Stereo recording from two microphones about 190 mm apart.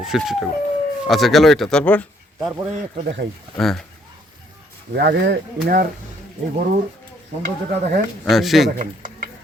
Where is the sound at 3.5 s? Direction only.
Centre (ahead or behind).